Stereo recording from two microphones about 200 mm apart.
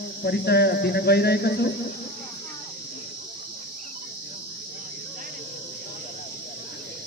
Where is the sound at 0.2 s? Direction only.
55° left (ahead or behind).